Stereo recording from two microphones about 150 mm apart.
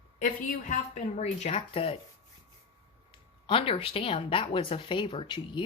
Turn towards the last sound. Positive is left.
turn(degrees=35)  # may be behind; listen again after turning